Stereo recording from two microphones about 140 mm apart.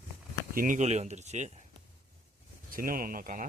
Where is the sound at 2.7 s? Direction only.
90° right.